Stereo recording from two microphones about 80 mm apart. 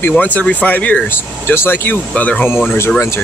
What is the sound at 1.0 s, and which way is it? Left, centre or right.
Speech, left.